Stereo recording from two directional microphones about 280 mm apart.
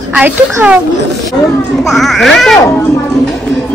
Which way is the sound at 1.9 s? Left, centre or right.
Centre.